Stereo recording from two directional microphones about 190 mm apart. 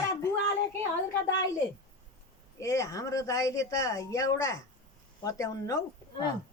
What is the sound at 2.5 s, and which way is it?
Speech, 15° left (ahead or behind).